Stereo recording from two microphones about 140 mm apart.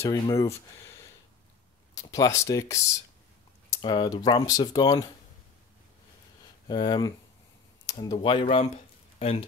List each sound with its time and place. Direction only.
0.0 s speech: 20° left (ahead or behind)
2.0 s speech: 25° left (ahead or behind)
6.7 s speech: 30° left (ahead or behind)